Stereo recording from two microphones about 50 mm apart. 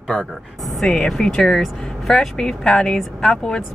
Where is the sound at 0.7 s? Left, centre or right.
Centre.